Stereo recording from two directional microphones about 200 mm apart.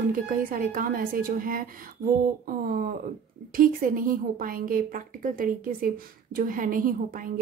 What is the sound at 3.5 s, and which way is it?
A woman's voice, 45° right (ahead or behind).